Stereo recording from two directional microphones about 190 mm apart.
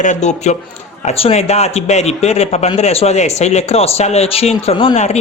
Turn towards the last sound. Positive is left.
turn(degrees=35)  # may be behind; listen again after turning